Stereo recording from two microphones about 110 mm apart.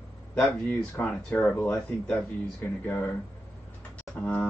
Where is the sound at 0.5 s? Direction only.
15° left (ahead or behind).